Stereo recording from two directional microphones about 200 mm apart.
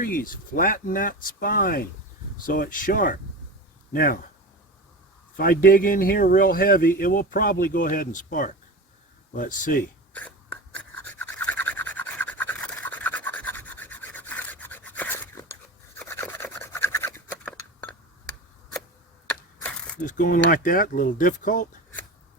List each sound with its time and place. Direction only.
0.0 s speech: 45° left (ahead or behind)
5.4 s speech: 45° left (ahead or behind)
10.1 s whispering: 5° left (ahead or behind)
10.8 s a sound: 5° left (ahead or behind)
16.0 s filing: 10° left (ahead or behind)
20.1 s speech: 45° left (ahead or behind)